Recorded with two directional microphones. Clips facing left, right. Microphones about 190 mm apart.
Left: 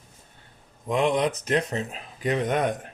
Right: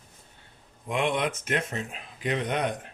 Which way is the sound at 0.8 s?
40° left (ahead or behind).